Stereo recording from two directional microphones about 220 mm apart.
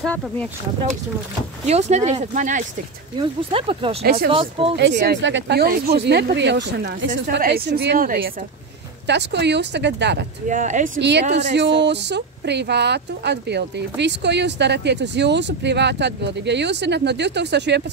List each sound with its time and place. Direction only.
0.0 s speech: 5° left (ahead or behind)
1.7 s speech: 30° right (ahead or behind)
4.0 s speech: 45° right (ahead or behind)
4.3 s speech: 25° right (ahead or behind)
4.7 s speech: 50° right (ahead or behind)
9.0 s speech: 50° right (ahead or behind)
10.5 s speech: 35° right (ahead or behind)
11.0 s speech: 50° right (ahead or behind)